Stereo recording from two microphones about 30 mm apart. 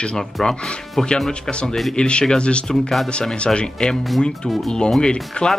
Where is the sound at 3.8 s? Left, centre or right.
Left.